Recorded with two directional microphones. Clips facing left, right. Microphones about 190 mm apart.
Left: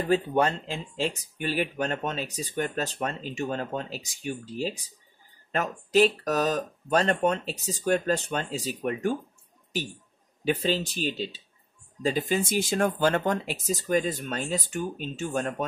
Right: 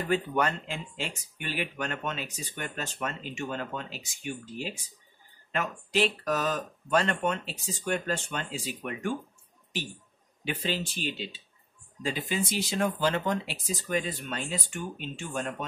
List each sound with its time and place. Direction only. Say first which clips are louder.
0.1 s speech: left 4 dB; 30° left (ahead or behind)
10.4 s speech: left 6 dB; 40° left (ahead or behind)